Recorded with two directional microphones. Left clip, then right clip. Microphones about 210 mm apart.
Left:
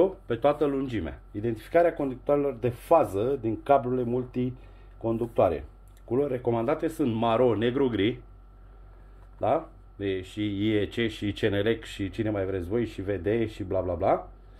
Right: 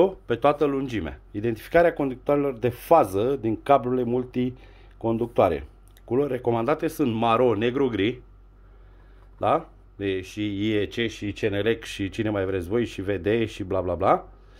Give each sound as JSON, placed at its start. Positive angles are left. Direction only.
{"t": 0.0, "sound": "speech", "side_deg": -30}
{"t": 9.4, "sound": "speech", "side_deg": -30}